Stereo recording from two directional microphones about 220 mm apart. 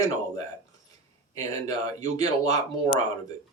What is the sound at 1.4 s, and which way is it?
Speech, 15° left (ahead or behind).